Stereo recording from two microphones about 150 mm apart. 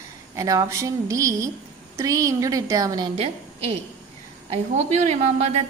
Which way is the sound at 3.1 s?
45° right (ahead or behind).